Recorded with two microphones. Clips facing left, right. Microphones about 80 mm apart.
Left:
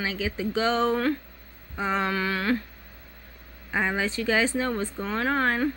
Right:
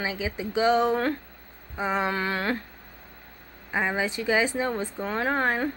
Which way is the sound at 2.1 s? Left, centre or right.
Right.